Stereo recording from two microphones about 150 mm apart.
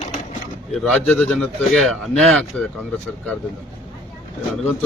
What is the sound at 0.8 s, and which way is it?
Speech, 10° left (ahead or behind).